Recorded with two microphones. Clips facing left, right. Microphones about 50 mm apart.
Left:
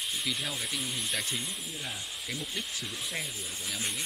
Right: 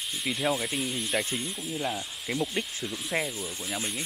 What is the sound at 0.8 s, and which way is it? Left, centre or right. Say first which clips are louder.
Speech: right 4 dB; centre.